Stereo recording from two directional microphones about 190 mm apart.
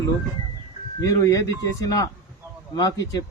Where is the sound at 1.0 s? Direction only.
20° left (ahead or behind).